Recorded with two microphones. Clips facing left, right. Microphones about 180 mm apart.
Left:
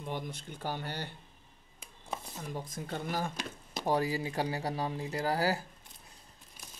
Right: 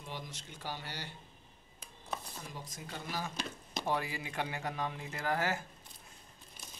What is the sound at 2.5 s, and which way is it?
Speech, 55° left (ahead or behind).